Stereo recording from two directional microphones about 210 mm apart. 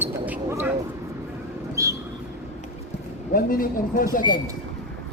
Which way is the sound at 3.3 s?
40° left (ahead or behind).